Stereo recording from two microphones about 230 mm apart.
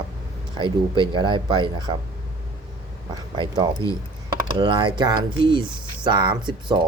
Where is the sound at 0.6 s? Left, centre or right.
Right.